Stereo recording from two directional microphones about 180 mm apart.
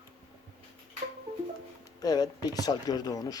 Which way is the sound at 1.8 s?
20° left (ahead or behind).